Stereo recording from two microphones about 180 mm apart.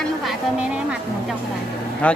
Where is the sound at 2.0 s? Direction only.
5° left (ahead or behind).